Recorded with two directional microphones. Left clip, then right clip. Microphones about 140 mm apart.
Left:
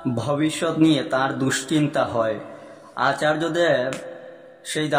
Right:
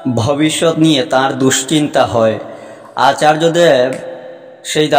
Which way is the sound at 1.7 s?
45° right (ahead or behind).